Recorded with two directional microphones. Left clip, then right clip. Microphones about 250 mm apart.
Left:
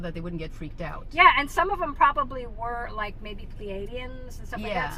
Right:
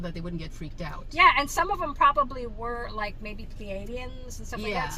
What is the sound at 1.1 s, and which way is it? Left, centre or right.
Speech, centre.